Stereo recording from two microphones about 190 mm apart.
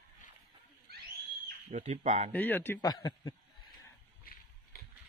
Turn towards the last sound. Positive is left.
turn(degrees=20)  # may be behind; listen again after turning